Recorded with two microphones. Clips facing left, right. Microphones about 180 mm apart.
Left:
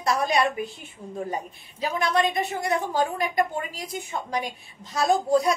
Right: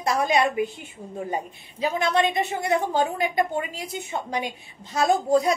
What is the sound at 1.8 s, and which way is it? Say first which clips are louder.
A woman's voice: right 2 dB; 25° right (ahead or behind).